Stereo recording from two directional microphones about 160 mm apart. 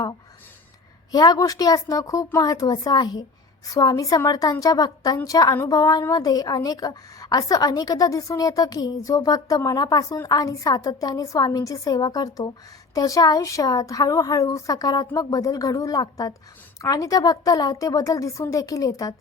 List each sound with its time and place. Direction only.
1.1 s a woman's voice: 25° left (ahead or behind)